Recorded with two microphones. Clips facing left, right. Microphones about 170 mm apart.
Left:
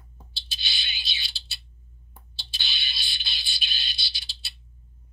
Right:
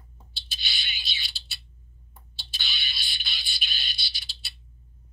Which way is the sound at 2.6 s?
25° left (ahead or behind).